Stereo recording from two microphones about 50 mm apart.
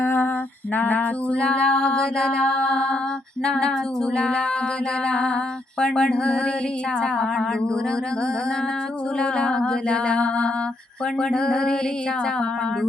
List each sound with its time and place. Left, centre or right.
0.0 s female singing: left
1.3 s mantra: left
4.2 s music: centre
7.0 s mantra: centre
9.2 s music: left
11.2 s mantra: centre